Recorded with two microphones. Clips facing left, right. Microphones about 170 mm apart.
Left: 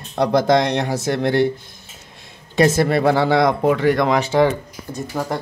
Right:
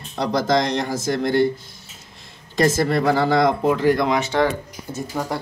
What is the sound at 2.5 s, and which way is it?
Speech, 65° left (ahead or behind).